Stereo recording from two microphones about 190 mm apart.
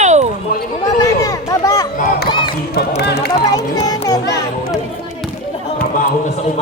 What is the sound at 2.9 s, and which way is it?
Speech, 60° left (ahead or behind).